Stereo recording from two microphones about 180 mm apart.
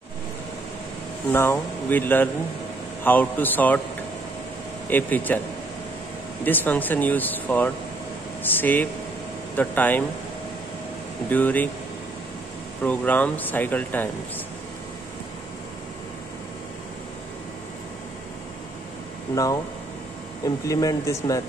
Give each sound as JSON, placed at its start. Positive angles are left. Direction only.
{"t": 1.3, "sound": "speech", "side_deg": 15}
{"t": 4.8, "sound": "speech", "side_deg": 10}
{"t": 6.4, "sound": "speech", "side_deg": 10}
{"t": 11.2, "sound": "speech", "side_deg": 10}
{"t": 12.8, "sound": "speech", "side_deg": 10}
{"t": 19.3, "sound": "speech", "side_deg": 20}